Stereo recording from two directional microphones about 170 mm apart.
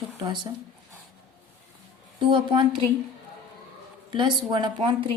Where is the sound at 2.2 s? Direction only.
30° right (ahead or behind).